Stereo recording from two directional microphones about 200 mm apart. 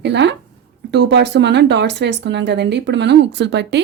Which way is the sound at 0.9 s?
60° right (ahead or behind).